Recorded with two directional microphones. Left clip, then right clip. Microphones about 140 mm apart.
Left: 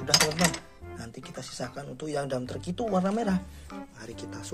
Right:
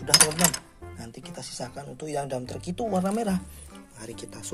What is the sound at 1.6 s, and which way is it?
Speech, centre (ahead or behind).